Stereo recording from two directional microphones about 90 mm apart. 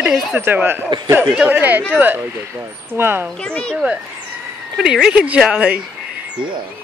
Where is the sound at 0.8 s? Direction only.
55° right (ahead or behind).